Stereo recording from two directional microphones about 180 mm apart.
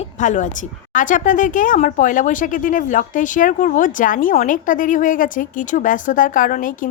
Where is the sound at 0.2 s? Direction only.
45° left (ahead or behind).